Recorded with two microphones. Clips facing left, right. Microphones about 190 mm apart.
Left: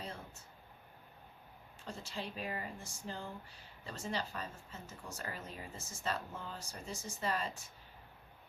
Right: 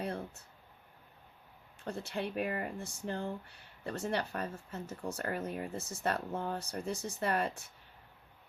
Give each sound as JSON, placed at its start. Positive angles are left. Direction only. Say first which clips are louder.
{"t": 1.8, "sound": "speech", "louder": "right 7 dB", "side_deg": -60}